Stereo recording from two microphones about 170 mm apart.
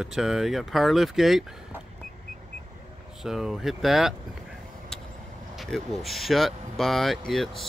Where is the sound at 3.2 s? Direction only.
5° right (ahead or behind).